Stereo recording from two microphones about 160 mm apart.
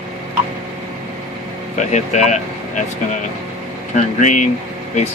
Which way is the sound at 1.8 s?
45° left (ahead or behind).